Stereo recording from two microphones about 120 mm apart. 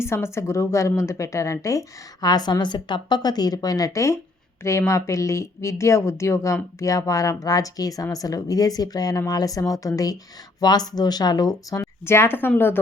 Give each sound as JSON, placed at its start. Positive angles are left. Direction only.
{"t": 0.0, "sound": "a woman's voice", "side_deg": 20}